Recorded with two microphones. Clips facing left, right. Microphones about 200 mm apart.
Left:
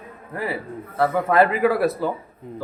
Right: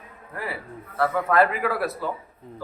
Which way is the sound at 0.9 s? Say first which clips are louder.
Left 3 dB; 25° left (ahead or behind).